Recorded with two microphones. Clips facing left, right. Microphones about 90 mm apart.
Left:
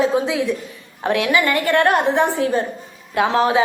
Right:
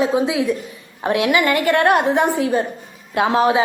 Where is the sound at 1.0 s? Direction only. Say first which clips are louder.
Right 1 dB; 20° right (ahead or behind).